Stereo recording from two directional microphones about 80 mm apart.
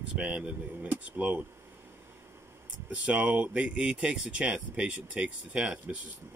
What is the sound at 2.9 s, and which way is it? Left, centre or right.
Speech, centre.